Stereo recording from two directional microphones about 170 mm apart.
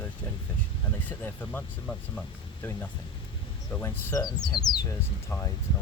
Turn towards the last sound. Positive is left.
turn(degrees=15)  # may be behind; listen again after turning